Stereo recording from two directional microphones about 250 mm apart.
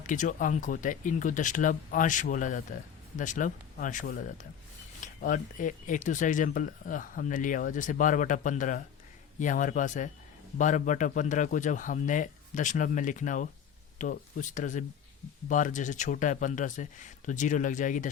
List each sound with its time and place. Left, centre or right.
0.1 s speech: left